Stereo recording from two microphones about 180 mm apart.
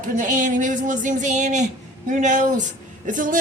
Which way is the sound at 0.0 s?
45° right (ahead or behind).